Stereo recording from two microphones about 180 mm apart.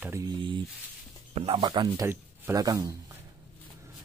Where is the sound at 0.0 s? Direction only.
15° right (ahead or behind).